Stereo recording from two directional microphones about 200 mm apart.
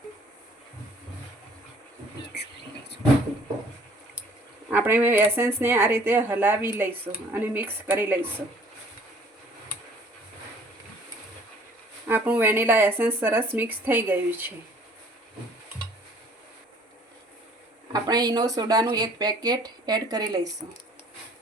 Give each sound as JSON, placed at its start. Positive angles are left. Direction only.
{"t": 4.7, "sound": "speech", "side_deg": -10}
{"t": 12.0, "sound": "speech", "side_deg": -10}
{"t": 17.9, "sound": "speech", "side_deg": -20}